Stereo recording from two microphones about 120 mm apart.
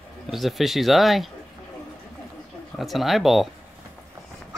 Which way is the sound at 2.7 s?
Centre (ahead or behind).